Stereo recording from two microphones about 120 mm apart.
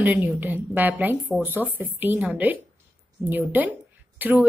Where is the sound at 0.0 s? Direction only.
15° right (ahead or behind).